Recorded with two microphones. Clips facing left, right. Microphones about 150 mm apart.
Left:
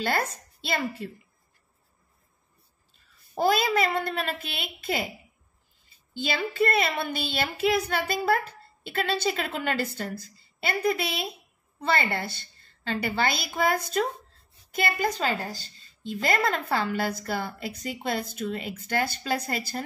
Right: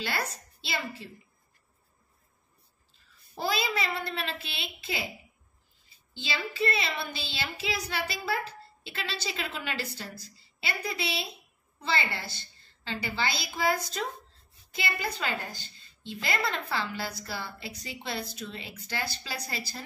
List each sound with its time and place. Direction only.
0.0 s a woman's voice: 50° left (ahead or behind)
3.3 s a woman's voice: 50° left (ahead or behind)
6.1 s a woman's voice: 50° left (ahead or behind)